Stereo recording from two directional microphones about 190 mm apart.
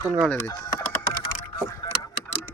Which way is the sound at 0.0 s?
15° right (ahead or behind).